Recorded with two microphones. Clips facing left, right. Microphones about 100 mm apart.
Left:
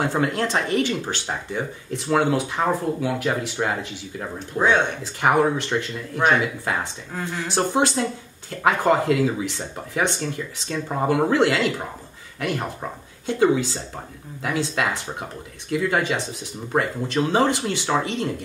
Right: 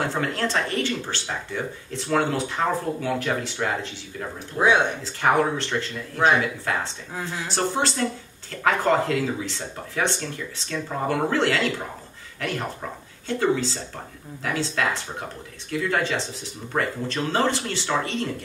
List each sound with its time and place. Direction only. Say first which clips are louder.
0.0 s speech: left 3 dB; 15° left (ahead or behind)
4.6 s speech: even; 10° right (ahead or behind)
5.0 s speech: left 2 dB; 15° left (ahead or behind)
10.7 s speech: left 3 dB; 15° left (ahead or behind)